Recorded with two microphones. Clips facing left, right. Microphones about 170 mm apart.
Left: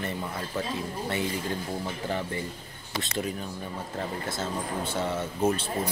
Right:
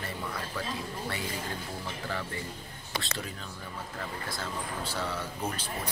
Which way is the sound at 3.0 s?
20° left (ahead or behind).